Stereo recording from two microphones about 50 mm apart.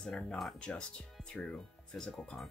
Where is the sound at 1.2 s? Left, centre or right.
Centre.